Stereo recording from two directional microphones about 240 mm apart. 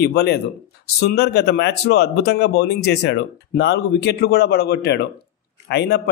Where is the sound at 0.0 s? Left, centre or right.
Left.